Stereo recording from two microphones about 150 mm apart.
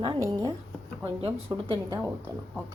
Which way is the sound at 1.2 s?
35° right (ahead or behind).